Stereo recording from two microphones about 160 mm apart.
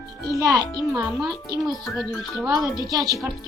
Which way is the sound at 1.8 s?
Centre (ahead or behind).